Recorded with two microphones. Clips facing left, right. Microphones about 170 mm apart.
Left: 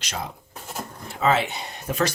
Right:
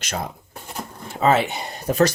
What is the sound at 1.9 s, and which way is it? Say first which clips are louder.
Speech: right 6 dB; 40° right (ahead or behind).